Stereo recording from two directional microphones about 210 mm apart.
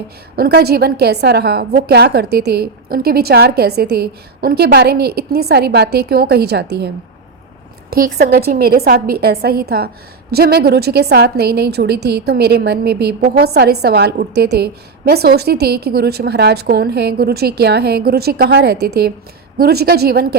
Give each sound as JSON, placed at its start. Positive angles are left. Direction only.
{"t": 0.3, "sound": "a woman's voice", "side_deg": -50}